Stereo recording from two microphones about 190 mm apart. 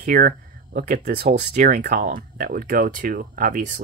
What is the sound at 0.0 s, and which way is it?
Speech, 50° right (ahead or behind).